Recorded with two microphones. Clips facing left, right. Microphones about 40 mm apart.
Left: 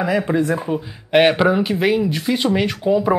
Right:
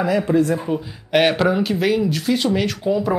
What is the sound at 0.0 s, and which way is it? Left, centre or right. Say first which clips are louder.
Speech: right 1 dB; centre.